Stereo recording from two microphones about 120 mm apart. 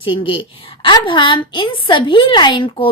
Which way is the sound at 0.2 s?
45° left (ahead or behind).